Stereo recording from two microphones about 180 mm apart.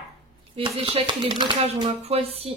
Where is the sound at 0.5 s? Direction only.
30° right (ahead or behind).